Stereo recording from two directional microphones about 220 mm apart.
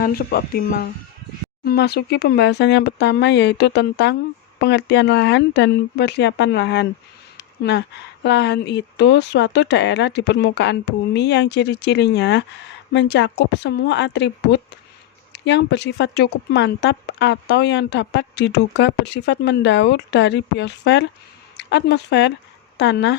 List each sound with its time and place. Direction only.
0.0 s speech: 45° left (ahead or behind)